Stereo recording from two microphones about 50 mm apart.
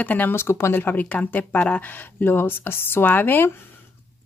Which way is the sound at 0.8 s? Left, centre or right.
Left.